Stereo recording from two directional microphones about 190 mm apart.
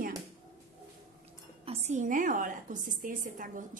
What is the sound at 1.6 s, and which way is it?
A woman's voice, 35° right (ahead or behind).